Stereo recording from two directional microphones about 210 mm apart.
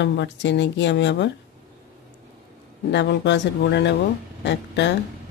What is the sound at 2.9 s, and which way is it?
A woman's voice, 55° left (ahead or behind).